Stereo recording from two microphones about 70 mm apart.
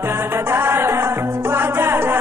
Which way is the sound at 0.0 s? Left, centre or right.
Right.